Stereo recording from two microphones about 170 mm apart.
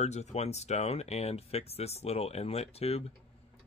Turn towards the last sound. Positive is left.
turn(degrees=35)  # may be behind; listen again after turning